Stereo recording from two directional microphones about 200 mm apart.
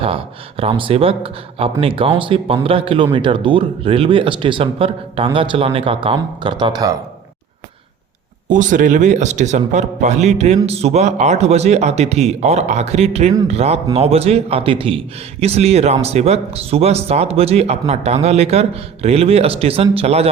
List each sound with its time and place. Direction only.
0.0 s speech: 30° right (ahead or behind)
8.4 s speech: 40° right (ahead or behind)